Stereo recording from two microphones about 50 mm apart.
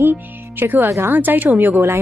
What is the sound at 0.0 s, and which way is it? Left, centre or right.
Speech, right.